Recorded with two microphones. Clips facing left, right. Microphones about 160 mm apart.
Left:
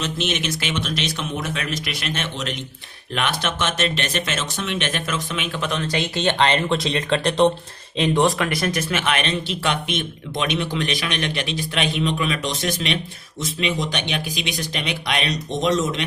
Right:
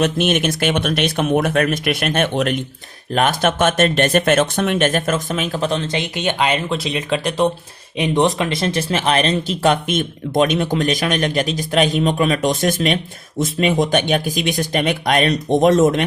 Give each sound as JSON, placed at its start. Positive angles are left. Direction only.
{"t": 0.0, "sound": "speech", "side_deg": -55}
{"t": 3.1, "sound": "speech", "side_deg": -45}
{"t": 6.0, "sound": "speech", "side_deg": -10}
{"t": 7.9, "sound": "speech", "side_deg": -15}